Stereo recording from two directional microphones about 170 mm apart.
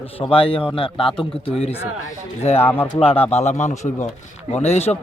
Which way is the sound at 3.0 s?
35° left (ahead or behind).